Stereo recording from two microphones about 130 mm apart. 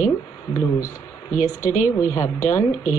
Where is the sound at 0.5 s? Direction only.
20° left (ahead or behind).